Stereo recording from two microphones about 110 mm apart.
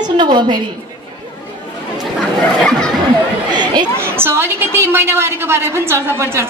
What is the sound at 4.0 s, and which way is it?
A woman's voice, 20° right (ahead or behind).